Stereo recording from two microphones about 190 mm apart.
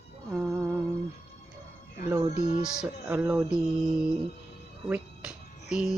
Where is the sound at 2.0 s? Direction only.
15° right (ahead or behind).